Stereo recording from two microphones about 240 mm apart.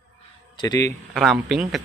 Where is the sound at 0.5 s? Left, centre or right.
Centre.